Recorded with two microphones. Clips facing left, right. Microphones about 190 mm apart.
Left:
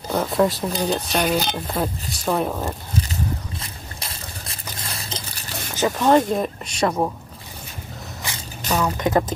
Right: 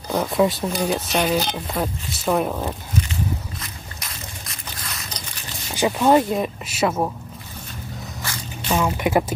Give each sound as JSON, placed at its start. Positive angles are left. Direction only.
{"t": 0.1, "sound": "speech", "side_deg": 0}
{"t": 3.6, "sound": "biting", "side_deg": 30}
{"t": 5.8, "sound": "speech", "side_deg": -10}
{"t": 8.6, "sound": "speech", "side_deg": -5}